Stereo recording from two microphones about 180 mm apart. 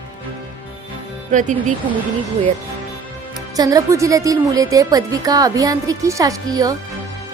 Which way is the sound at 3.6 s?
20° right (ahead or behind).